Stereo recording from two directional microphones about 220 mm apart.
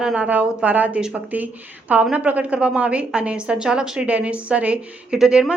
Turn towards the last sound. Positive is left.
turn(degrees=-5)  # may be behind; listen again after turning